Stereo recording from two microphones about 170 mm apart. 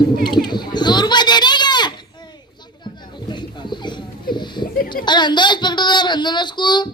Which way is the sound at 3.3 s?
25° left (ahead or behind).